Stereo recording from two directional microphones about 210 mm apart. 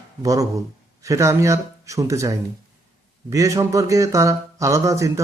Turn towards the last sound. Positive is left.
turn(degrees=-15)  # may be behind; listen again after turning